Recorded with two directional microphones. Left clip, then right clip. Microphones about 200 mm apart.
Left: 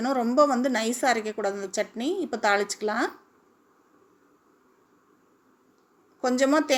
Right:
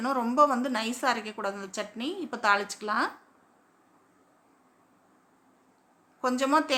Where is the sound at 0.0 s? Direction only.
5° left (ahead or behind).